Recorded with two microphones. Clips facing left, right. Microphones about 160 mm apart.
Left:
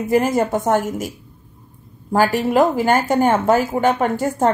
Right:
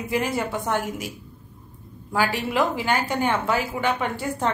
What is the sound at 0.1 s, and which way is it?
Speech, 45° left (ahead or behind).